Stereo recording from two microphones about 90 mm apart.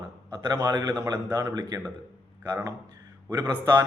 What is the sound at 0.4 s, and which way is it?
A man's voice, 50° right (ahead or behind).